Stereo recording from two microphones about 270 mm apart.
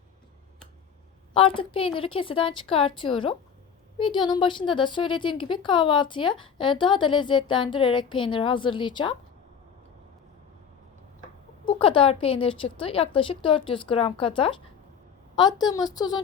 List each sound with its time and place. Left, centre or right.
1.3 s speech: centre
11.6 s speech: centre